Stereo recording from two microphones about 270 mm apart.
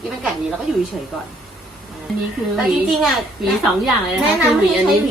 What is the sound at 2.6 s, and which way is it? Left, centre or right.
A woman's voice, centre.